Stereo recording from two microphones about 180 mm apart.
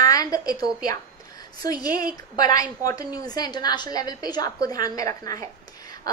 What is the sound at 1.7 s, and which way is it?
A woman's voice, 20° left (ahead or behind).